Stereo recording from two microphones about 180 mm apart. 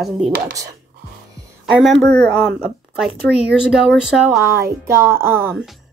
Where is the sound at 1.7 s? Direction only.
Centre (ahead or behind).